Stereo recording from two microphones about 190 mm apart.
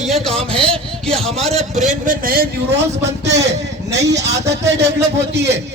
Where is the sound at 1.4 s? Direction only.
35° right (ahead or behind).